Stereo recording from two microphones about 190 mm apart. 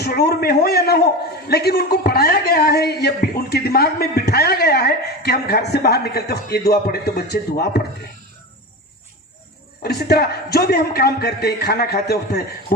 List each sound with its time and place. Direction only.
0.0 s a man's voice: 55° left (ahead or behind)
9.8 s a man's voice: 60° left (ahead or behind)